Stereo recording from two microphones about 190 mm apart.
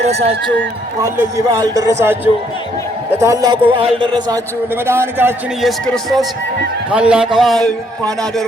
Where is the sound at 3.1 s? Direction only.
15° right (ahead or behind).